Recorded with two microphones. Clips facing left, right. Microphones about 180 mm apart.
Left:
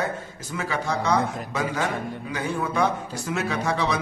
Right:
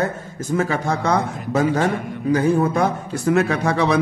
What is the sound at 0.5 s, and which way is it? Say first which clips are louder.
A man's voice: right 6 dB; 45° right (ahead or behind).